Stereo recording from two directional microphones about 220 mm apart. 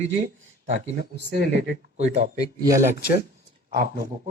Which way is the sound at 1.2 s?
50° right (ahead or behind).